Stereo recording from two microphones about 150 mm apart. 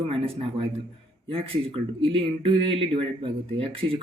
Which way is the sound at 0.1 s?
40° right (ahead or behind).